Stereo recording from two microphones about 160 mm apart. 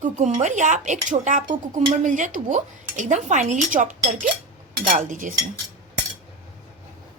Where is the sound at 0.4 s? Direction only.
50° right (ahead or behind).